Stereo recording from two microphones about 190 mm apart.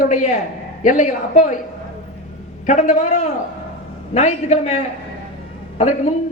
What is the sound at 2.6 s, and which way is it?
A man's voice, 40° left (ahead or behind).